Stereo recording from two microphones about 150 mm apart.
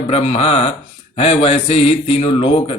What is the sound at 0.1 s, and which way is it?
A man's voice, 45° left (ahead or behind).